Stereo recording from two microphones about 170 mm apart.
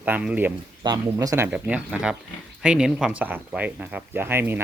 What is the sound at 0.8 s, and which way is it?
Speech, 20° right (ahead or behind).